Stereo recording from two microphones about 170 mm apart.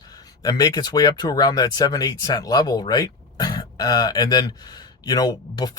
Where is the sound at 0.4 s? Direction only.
20° left (ahead or behind).